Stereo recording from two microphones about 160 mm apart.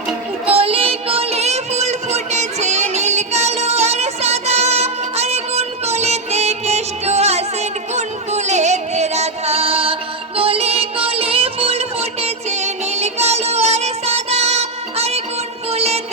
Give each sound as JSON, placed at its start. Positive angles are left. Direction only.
{"t": 0.5, "sound": "music", "side_deg": -35}